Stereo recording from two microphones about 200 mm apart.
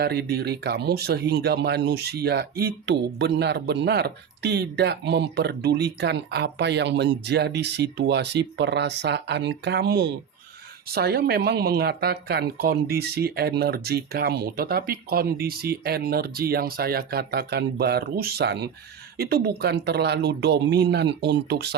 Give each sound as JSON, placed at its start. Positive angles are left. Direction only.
{"t": 0.0, "sound": "speech", "side_deg": -55}